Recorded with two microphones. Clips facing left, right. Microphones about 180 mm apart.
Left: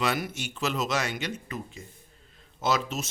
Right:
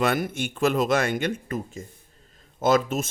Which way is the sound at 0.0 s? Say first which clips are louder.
Right 5 dB; 55° right (ahead or behind).